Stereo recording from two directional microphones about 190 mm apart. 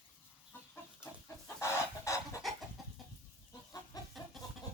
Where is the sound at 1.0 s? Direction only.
15° left (ahead or behind).